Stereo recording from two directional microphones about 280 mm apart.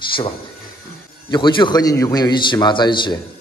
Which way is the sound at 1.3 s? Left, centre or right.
Centre.